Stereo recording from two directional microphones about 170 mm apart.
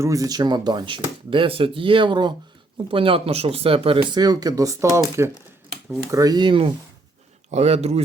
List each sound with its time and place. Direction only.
0.0 s speech: 20° right (ahead or behind)
7.5 s a man's voice: 40° right (ahead or behind)